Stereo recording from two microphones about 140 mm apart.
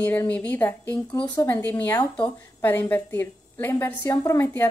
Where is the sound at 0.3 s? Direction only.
10° left (ahead or behind).